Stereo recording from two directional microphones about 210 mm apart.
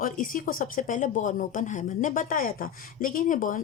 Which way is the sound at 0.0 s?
40° left (ahead or behind).